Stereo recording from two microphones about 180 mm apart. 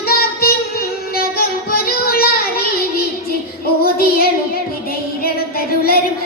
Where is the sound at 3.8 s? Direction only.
55° left (ahead or behind).